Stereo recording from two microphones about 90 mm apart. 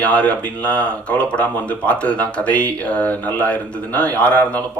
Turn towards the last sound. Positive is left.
turn(degrees=15)  # may be behind; listen again after turning